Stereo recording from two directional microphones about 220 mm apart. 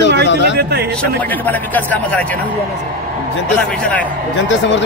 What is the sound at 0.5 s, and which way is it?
Speech, 45° right (ahead or behind).